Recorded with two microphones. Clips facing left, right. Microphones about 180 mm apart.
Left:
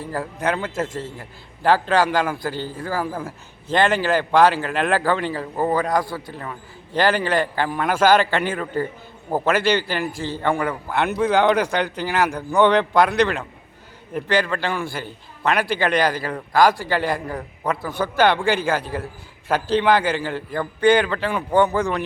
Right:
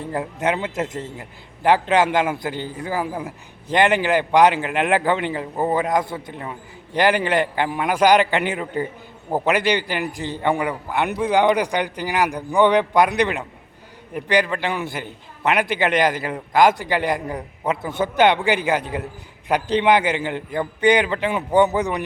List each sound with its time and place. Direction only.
0.0 s a man's voice: 20° right (ahead or behind)